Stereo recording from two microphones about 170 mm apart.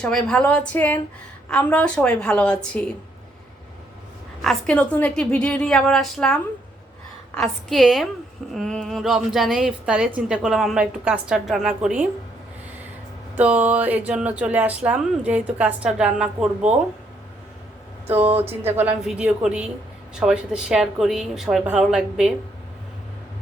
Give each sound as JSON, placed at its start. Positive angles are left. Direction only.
{"t": 0.0, "sound": "a woman's voice", "side_deg": 5}
{"t": 4.4, "sound": "a woman's voice", "side_deg": 5}
{"t": 13.3, "sound": "speech", "side_deg": -10}
{"t": 18.2, "sound": "speech", "side_deg": -35}
{"t": 18.6, "sound": "a woman's voice", "side_deg": -10}